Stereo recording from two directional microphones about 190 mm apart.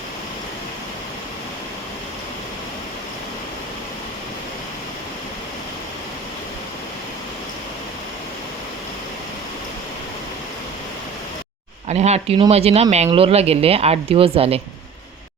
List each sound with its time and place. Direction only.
11.9 s speech: 35° right (ahead or behind)